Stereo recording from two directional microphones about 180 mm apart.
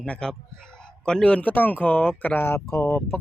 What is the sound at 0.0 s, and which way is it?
A man's voice, 5° left (ahead or behind).